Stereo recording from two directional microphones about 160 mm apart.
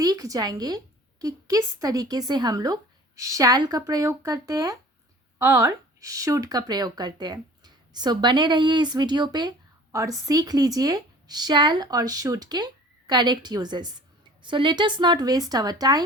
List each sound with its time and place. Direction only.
0.0 s speech: 20° right (ahead or behind)